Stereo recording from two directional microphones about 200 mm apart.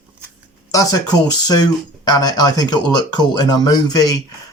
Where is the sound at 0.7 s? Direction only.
15° left (ahead or behind).